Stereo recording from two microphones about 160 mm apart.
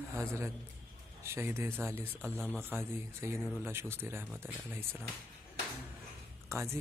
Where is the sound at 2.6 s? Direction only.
15° right (ahead or behind).